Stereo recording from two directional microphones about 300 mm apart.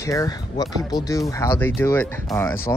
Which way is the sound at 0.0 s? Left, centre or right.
Centre.